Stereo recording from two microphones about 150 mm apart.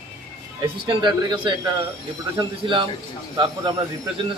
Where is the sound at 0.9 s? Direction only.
30° right (ahead or behind).